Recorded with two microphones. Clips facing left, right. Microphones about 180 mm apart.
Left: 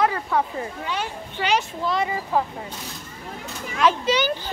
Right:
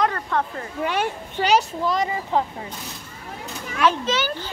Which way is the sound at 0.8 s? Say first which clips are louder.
Right 8 dB; 60° right (ahead or behind).